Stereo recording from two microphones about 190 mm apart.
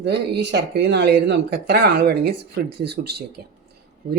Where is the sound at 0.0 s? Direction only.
65° right (ahead or behind).